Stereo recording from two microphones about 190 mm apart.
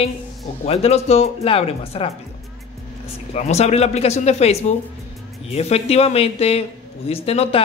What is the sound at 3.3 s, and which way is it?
Speech, 35° left (ahead or behind).